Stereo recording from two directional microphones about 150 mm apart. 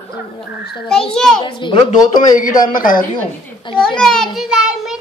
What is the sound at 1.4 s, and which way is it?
Speech, 30° left (ahead or behind).